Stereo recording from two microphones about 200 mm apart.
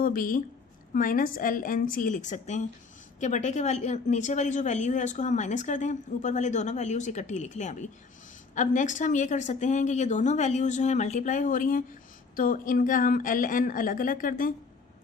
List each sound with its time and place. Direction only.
0.0 s a woman's voice: 45° left (ahead or behind)